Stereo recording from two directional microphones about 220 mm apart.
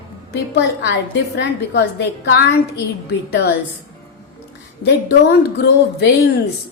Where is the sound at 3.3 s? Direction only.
50° left (ahead or behind).